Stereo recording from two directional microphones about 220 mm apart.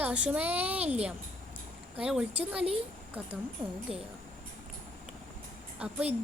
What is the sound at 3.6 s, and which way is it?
Speech, 25° right (ahead or behind).